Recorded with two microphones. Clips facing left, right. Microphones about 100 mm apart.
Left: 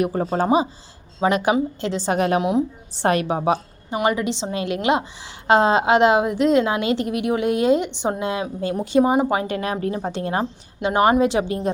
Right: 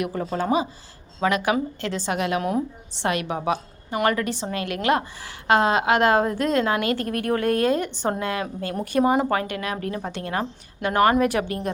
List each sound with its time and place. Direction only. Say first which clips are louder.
0.0 s speech: left 5 dB; 40° left (ahead or behind)
2.4 s speech: left 4 dB; 15° left (ahead or behind)
2.9 s a woman's voice: left 5 dB; 40° left (ahead or behind)
4.0 s a woman's voice: left 2 dB; 20° left (ahead or behind)
9.5 s a woman's voice: left 4 dB; 30° left (ahead or behind)